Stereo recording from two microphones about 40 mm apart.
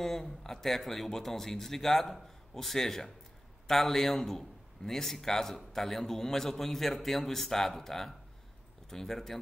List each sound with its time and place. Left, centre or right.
0.0 s a man's voice: centre